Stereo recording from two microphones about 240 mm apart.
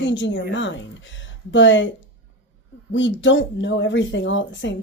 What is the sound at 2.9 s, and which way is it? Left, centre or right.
Speech, left.